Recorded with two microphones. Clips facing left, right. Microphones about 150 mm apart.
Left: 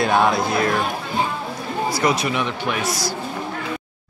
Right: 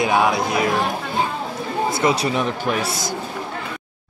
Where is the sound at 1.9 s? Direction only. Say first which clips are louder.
Right 1 dB; 30° right (ahead or behind).